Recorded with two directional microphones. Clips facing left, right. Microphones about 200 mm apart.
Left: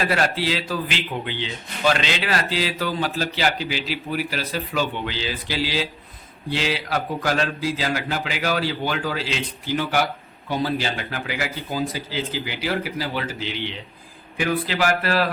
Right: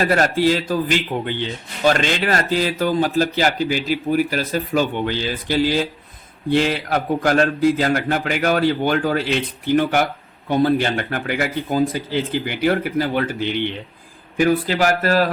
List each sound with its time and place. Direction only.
0.0 s a man's voice: 45° right (ahead or behind)
14.3 s a man's voice: 45° right (ahead or behind)